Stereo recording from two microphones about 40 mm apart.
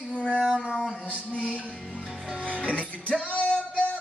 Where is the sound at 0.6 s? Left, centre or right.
Left.